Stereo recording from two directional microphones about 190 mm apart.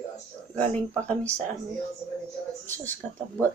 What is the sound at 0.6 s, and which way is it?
Speech, 5° left (ahead or behind).